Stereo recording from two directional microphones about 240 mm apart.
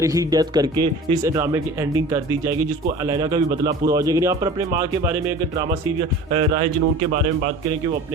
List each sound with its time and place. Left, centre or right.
0.0 s speech: centre
6.3 s speech: right